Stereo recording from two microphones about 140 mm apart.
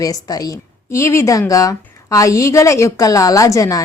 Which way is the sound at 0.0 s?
25° left (ahead or behind).